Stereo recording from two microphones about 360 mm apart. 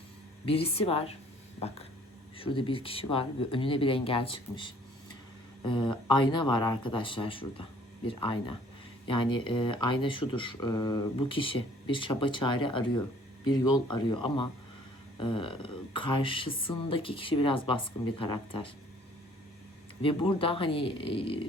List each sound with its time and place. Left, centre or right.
0.4 s speech: centre
20.0 s speech: centre